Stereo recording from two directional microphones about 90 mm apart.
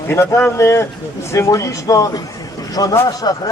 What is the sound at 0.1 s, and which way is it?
A man's voice, 30° left (ahead or behind).